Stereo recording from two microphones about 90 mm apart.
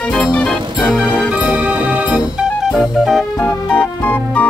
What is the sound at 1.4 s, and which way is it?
Music, 15° right (ahead or behind).